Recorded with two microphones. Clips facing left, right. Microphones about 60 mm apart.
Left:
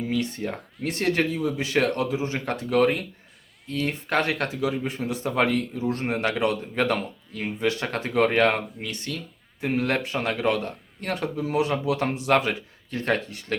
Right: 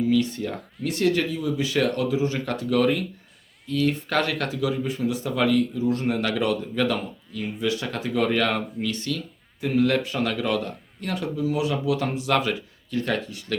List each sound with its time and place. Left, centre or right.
0.1 s speech: left